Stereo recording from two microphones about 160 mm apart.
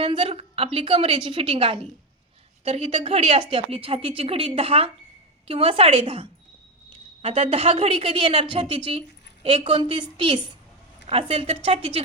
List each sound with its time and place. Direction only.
0.0 s a woman's voice: 35° right (ahead or behind)